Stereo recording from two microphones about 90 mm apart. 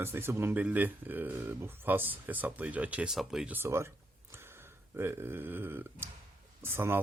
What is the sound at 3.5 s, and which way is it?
Speech, 30° right (ahead or behind).